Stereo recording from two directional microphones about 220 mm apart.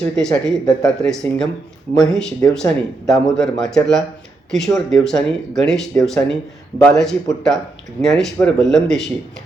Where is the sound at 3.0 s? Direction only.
Centre (ahead or behind).